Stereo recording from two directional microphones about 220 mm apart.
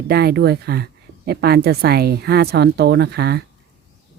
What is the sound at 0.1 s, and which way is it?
A woman's voice, 45° right (ahead or behind).